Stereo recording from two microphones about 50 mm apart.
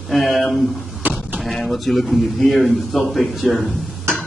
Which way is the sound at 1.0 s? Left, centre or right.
Right.